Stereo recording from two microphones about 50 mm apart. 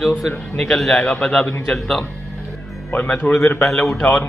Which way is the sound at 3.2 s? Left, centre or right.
Left.